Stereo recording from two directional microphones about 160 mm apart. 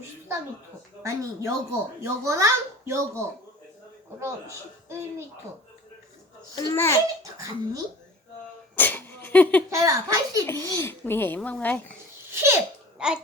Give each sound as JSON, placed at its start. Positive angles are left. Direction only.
{"t": 1.0, "sound": "a child's voice", "side_deg": -20}
{"t": 6.6, "sound": "a child's voice", "side_deg": 20}
{"t": 7.2, "sound": "a child's voice", "side_deg": -20}
{"t": 8.7, "sound": "sneeze", "side_deg": 10}
{"t": 9.6, "sound": "a child's voice", "side_deg": -20}
{"t": 10.4, "sound": "a child's voice", "side_deg": 15}
{"t": 12.3, "sound": "laughter", "side_deg": -15}
{"t": 13.0, "sound": "speech", "side_deg": -5}